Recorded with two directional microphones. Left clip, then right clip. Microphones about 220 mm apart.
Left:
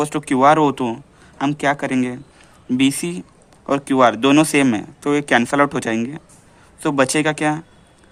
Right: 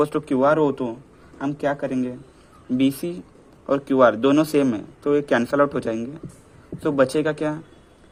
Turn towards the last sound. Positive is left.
turn(degrees=30)  # may be behind; listen again after turning